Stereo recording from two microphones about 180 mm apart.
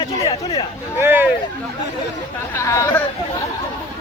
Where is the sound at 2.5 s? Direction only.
15° left (ahead or behind).